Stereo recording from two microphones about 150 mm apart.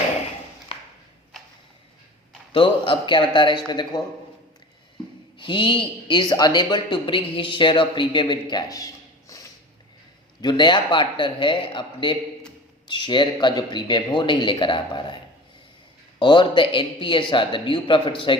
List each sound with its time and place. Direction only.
2.5 s a man's voice: 35° left (ahead or behind)
5.4 s speech: 35° left (ahead or behind)
10.4 s speech: 30° left (ahead or behind)